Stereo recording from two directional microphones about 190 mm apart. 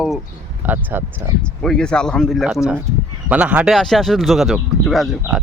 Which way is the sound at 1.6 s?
5° left (ahead or behind).